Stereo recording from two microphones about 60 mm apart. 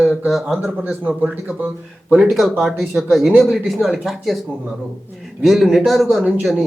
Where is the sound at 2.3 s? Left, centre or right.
Centre.